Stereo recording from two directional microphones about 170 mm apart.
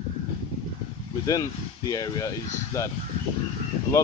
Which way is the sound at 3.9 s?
20° left (ahead or behind).